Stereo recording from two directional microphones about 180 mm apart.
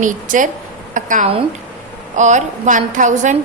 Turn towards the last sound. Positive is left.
turn(degrees=-45)  # may be behind; listen again after turning